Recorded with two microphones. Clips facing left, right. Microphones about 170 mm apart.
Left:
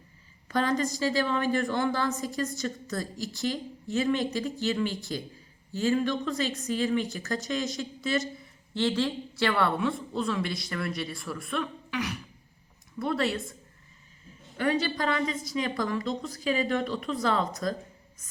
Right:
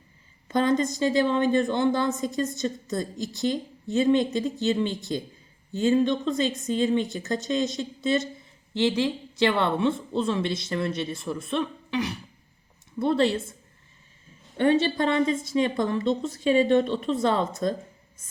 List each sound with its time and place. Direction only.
0.4 s a woman's voice: 20° right (ahead or behind)
14.5 s a woman's voice: 25° right (ahead or behind)